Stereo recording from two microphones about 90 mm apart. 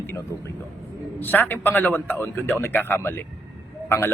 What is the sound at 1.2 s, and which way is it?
Speech, 20° left (ahead or behind).